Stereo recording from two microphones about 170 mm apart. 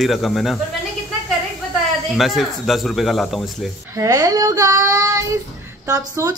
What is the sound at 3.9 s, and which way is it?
A woman's voice, 20° right (ahead or behind).